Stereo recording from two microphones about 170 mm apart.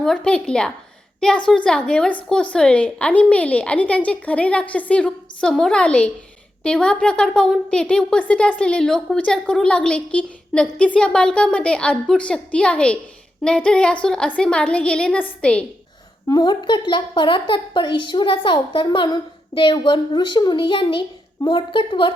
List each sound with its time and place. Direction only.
0.0 s a woman's voice: 5° left (ahead or behind)
16.2 s a woman's voice: 25° left (ahead or behind)